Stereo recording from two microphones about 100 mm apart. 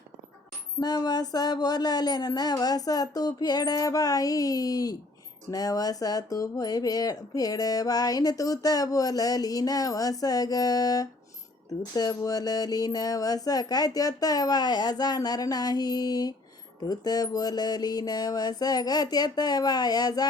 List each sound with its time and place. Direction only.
0.8 s speech: 40° left (ahead or behind)